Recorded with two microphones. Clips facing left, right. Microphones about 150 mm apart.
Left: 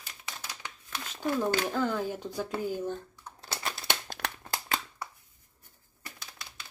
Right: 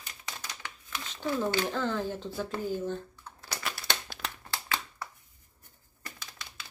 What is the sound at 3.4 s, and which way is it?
Crumpling, 30° left (ahead or behind).